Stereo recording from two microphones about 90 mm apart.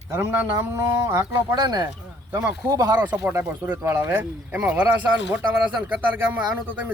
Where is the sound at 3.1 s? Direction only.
15° right (ahead or behind).